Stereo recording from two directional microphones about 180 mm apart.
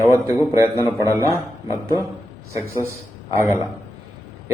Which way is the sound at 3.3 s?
15° right (ahead or behind).